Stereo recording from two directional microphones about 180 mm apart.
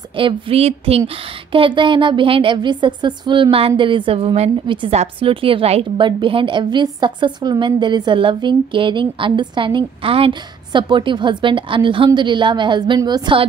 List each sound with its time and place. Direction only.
0.1 s speech: 30° right (ahead or behind)